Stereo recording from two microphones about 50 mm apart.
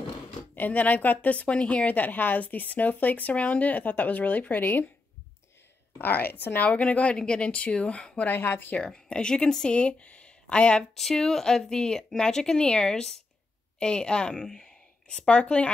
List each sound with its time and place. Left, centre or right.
0.6 s a woman's voice: left
5.9 s a woman's voice: left; by 8.3 s centre
8.3 s a woman's voice: left
8.7 s speech: left
10.8 s a woman's voice: centre; by 15.7 s left